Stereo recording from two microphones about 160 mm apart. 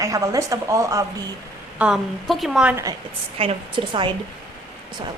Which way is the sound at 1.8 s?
Centre (ahead or behind).